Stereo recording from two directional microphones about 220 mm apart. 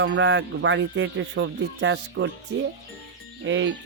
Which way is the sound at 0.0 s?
55° right (ahead or behind).